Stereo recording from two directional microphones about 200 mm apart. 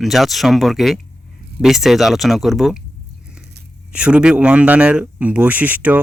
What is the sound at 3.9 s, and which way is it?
Speech, 5° right (ahead or behind).